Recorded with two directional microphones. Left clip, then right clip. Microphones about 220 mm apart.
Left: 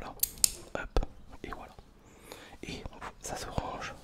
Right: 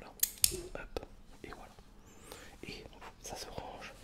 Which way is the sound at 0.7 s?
35° left (ahead or behind).